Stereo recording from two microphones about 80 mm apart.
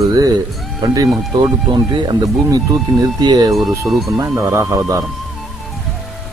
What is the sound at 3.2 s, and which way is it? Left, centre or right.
Speech, right.